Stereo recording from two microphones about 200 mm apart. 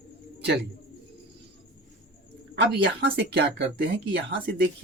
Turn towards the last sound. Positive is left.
turn(degrees=-55)  # may be behind; listen again after turning